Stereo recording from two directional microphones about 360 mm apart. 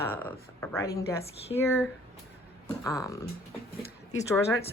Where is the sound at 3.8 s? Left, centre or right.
Centre.